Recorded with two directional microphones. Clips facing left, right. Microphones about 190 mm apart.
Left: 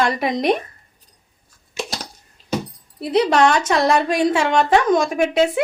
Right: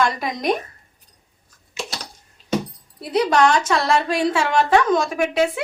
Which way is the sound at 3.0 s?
25° left (ahead or behind).